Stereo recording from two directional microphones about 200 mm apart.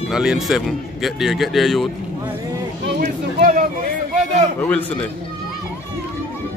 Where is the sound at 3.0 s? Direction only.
40° right (ahead or behind).